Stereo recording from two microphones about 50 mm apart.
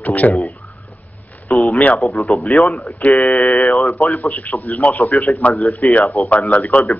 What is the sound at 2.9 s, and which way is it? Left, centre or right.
Speech, left.